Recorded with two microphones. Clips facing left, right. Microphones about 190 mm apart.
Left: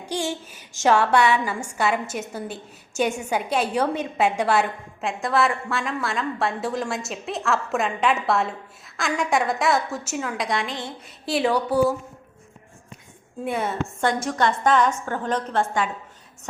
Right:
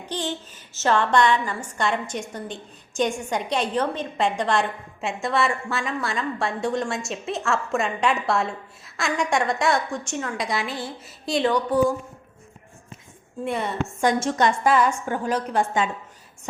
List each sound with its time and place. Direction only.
0.0 s a woman's voice: 10° left (ahead or behind); by 10.9 s 5° right (ahead or behind)
11.3 s speech: 5° left (ahead or behind)
13.4 s a woman's voice: centre (ahead or behind)
14.0 s a woman's voice: 20° right (ahead or behind)
14.6 s a woman's voice: 5° right (ahead or behind)